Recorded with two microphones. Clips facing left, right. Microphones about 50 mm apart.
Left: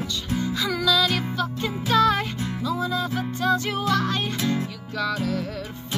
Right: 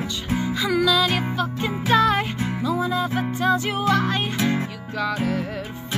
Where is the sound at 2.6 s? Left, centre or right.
Centre.